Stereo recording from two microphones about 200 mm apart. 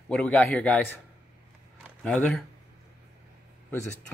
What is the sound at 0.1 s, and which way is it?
Speech, 5° left (ahead or behind).